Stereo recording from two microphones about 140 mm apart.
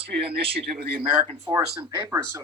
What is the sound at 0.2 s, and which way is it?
Speech, 40° right (ahead or behind).